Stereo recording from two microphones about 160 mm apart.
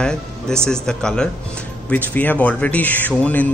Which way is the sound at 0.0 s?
5° left (ahead or behind).